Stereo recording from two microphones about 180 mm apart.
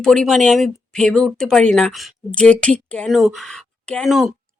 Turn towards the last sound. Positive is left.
turn(degrees=0)  # may be behind; listen again after turning